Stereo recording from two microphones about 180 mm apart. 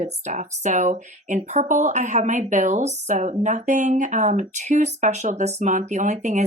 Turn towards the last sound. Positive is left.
turn(degrees=-45)  # may be behind; listen again after turning